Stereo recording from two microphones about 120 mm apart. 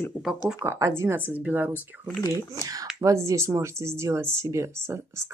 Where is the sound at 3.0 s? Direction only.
25° right (ahead or behind).